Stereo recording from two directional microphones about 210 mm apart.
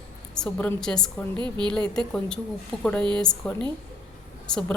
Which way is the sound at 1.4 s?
20° right (ahead or behind).